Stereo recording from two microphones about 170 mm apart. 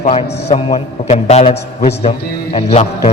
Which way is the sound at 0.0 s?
40° left (ahead or behind).